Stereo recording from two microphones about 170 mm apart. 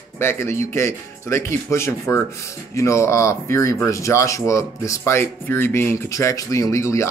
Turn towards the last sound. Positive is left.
turn(degrees=15)  # may be behind; listen again after turning